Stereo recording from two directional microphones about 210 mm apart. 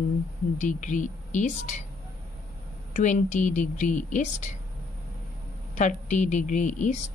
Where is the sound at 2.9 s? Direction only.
35° left (ahead or behind).